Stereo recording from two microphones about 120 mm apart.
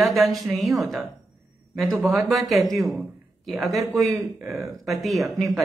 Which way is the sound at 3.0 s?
Centre (ahead or behind).